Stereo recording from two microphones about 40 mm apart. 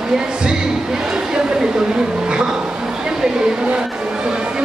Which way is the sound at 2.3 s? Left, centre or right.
Right.